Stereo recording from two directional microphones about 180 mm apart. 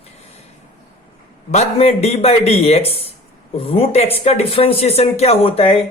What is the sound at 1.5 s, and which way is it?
Speech, 35° left (ahead or behind).